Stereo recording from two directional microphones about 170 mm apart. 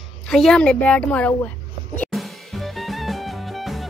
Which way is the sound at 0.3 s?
5° left (ahead or behind).